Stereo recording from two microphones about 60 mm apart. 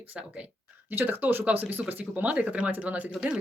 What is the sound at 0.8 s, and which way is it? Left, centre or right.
Speech, right.